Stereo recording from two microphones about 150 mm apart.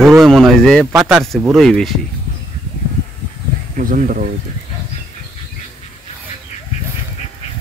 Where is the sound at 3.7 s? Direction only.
60° right (ahead or behind).